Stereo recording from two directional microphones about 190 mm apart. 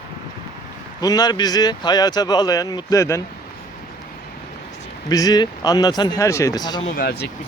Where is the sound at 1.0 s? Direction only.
20° left (ahead or behind).